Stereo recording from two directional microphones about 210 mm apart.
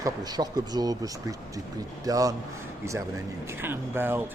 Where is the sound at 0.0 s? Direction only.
20° right (ahead or behind).